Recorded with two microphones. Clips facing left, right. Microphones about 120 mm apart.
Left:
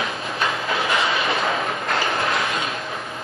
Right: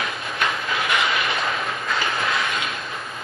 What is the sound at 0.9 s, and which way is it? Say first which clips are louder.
Train: even; 30° left (ahead or behind).